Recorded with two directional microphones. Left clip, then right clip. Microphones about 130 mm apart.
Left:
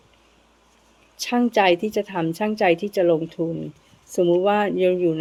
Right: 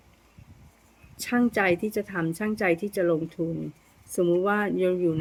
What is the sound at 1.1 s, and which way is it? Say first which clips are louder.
A woman's voice: left 5 dB; 30° right (ahead or behind).